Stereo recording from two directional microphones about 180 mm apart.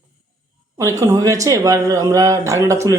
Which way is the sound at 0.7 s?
15° right (ahead or behind).